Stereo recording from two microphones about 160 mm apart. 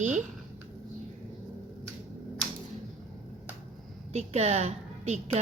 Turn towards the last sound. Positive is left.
turn(degrees=-45)  # may be behind; listen again after turning